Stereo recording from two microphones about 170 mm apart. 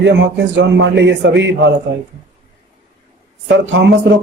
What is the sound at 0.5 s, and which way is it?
A man's voice, 90° right.